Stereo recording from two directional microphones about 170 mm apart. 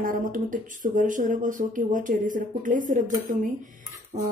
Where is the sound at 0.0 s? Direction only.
55° right (ahead or behind).